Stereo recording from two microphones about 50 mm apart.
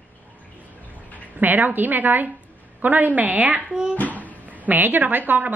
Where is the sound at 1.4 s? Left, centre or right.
Right.